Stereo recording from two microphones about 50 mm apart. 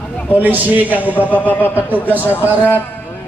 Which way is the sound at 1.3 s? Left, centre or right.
Left.